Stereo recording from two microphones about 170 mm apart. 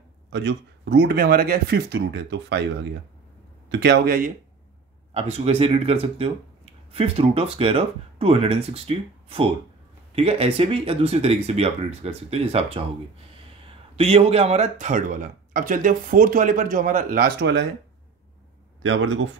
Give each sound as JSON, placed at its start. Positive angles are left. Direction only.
{"t": 0.3, "sound": "speech", "side_deg": -90}
{"t": 5.1, "sound": "speech", "side_deg": -35}
{"t": 13.9, "sound": "speech", "side_deg": -35}